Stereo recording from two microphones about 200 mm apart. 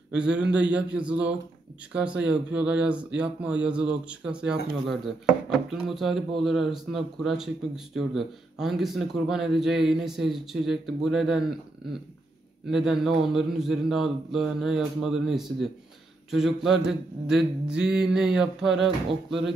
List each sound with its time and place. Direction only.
0.1 s speech: 5° right (ahead or behind)
12.6 s speech: centre (ahead or behind)